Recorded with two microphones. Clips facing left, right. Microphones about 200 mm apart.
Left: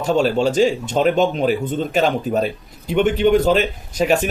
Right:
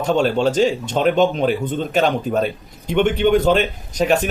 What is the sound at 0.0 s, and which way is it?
A man's voice, 5° left (ahead or behind).